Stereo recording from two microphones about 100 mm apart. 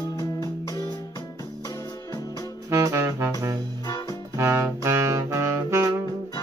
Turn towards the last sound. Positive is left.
turn(degrees=-30)  # may be behind; listen again after turning